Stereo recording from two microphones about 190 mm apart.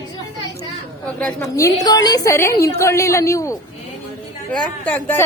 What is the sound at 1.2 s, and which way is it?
A woman's voice, 15° left (ahead or behind).